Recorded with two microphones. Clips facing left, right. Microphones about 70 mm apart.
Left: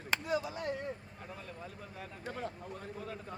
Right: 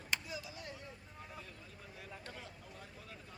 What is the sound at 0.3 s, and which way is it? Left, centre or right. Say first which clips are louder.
Chop: left 12 dB; left.